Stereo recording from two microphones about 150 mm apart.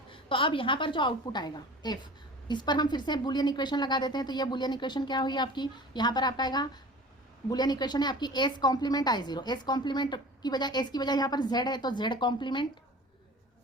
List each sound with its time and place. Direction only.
0.1 s a woman's voice: 35° left (ahead or behind)